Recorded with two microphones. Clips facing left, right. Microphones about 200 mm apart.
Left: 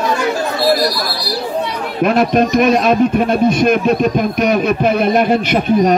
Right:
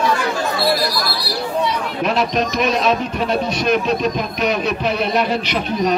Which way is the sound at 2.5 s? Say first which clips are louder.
Left 6 dB; 50° left (ahead or behind).